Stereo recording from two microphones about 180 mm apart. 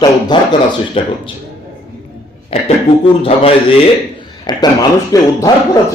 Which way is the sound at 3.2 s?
35° left (ahead or behind).